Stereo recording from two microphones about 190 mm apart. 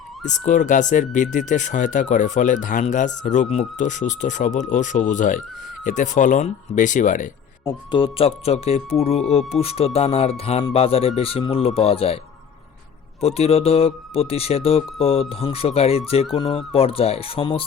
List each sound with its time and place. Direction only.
0.2 s speech: 40° left (ahead or behind)
7.6 s speech: 20° left (ahead or behind)
13.2 s speech: 30° left (ahead or behind)